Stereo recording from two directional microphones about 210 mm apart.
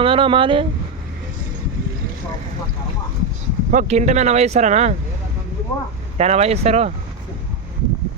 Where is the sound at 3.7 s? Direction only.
35° right (ahead or behind).